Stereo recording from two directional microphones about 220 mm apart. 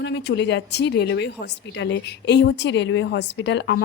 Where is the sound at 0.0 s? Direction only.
55° left (ahead or behind).